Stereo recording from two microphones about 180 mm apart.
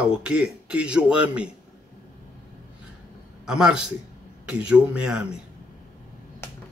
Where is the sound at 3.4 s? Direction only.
5° right (ahead or behind).